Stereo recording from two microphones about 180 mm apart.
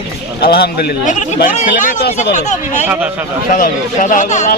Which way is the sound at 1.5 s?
45° left (ahead or behind).